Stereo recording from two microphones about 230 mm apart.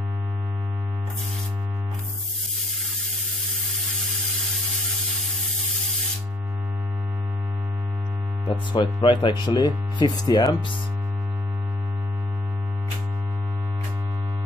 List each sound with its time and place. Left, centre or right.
8.5 s hum: centre
10.2 s speech: centre